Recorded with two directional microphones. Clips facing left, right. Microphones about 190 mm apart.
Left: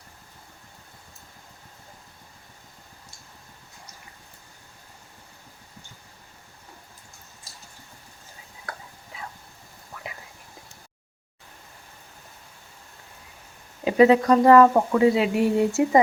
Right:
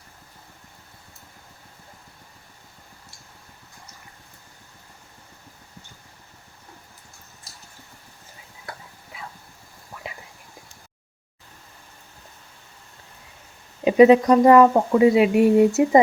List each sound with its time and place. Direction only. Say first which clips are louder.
13.8 s speech: right 4 dB; 20° right (ahead or behind)